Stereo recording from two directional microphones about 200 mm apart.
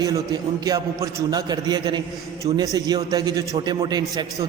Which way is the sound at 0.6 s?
20° right (ahead or behind).